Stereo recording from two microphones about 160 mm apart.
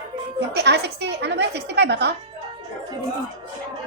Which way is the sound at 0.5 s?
90° right.